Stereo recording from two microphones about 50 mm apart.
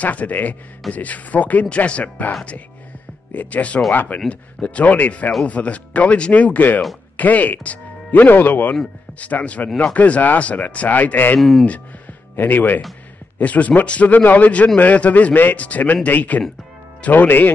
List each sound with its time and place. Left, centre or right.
0.0 s a man's voice: left
3.3 s a man's voice: left
9.2 s a man's voice: left
11.3 s speech: centre
12.4 s a man's voice: left
13.4 s a man's voice: left
17.3 s a man's voice: left